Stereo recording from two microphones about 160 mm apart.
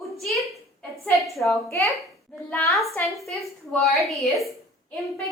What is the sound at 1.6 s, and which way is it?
A woman's voice, 20° left (ahead or behind).